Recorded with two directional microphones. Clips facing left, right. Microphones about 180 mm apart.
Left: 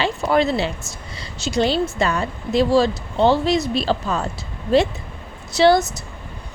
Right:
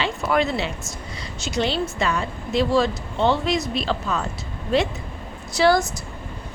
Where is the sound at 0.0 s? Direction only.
35° left (ahead or behind).